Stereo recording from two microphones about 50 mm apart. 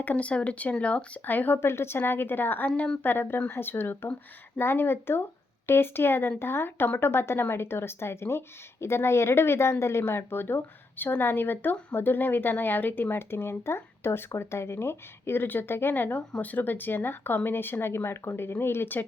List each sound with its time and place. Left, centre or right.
0.0 s speech: left
1.2 s speech: left
1.6 s speech: left
2.6 s speech: left
3.0 s speech: left
16.4 s speech: left